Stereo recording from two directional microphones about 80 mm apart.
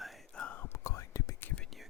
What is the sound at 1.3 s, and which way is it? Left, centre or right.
Whispering, left.